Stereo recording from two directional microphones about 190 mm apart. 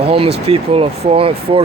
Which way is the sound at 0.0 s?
30° right (ahead or behind).